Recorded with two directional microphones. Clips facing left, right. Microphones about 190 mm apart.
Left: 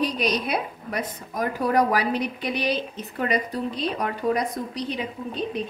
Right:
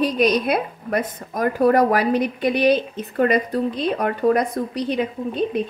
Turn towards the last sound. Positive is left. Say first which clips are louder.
# right 6 dB
turn(degrees=-55)  # may be behind; listen again after turning